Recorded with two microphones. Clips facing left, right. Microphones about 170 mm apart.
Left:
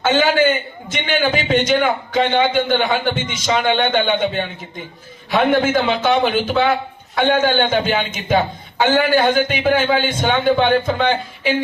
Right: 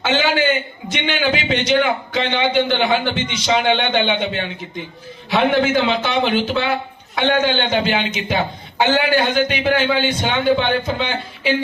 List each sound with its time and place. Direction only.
0.0 s a man's voice: 50° left (ahead or behind)
5.3 s a man's voice: 45° left (ahead or behind)